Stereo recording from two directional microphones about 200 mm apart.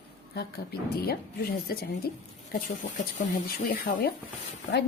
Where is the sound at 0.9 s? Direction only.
50° left (ahead or behind).